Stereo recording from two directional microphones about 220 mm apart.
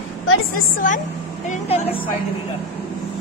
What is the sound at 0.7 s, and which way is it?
A woman's voice, 35° left (ahead or behind).